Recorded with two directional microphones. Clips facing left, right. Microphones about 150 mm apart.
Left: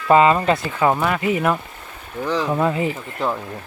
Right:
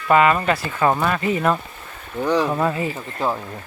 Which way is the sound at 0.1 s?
25° left (ahead or behind).